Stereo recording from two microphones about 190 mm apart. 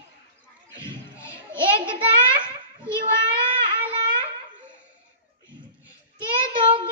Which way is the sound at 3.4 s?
25° right (ahead or behind).